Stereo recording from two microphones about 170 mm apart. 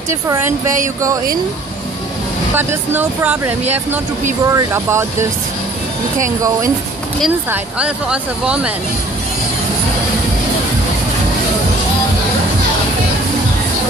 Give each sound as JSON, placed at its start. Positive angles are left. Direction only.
{"t": 0.1, "sound": "speech", "side_deg": -15}
{"t": 2.5, "sound": "speech", "side_deg": -10}
{"t": 7.8, "sound": "speech", "side_deg": -5}